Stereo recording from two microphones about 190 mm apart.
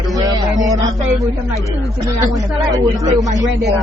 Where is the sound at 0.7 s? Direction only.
20° right (ahead or behind).